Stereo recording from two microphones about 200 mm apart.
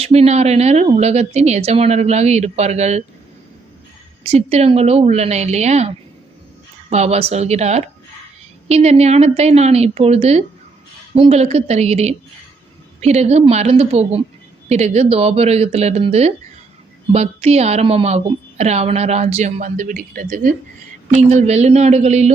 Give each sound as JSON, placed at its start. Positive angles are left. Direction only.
{"t": 0.0, "sound": "a woman's voice", "side_deg": -30}
{"t": 4.2, "sound": "a woman's voice", "side_deg": -30}
{"t": 6.9, "sound": "a woman's voice", "side_deg": -30}